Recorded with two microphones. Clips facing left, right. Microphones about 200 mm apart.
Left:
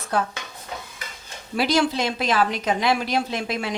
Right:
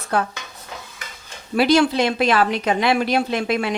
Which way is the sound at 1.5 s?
65° right (ahead or behind).